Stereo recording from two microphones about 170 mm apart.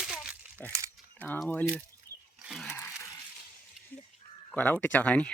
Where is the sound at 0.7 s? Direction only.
15° right (ahead or behind).